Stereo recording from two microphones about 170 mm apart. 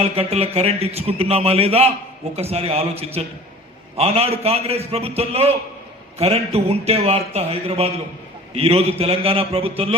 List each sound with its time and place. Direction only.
0.0 s a man's voice: 35° right (ahead or behind)